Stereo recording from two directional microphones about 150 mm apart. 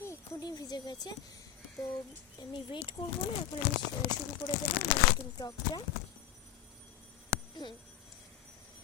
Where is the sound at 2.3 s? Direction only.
30° left (ahead or behind).